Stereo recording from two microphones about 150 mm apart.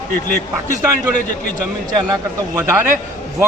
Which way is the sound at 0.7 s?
60° left (ahead or behind).